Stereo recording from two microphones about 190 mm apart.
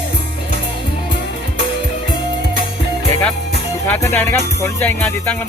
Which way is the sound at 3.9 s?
10° left (ahead or behind).